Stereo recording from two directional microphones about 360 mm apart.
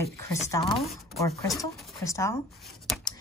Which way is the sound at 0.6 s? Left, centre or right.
Centre.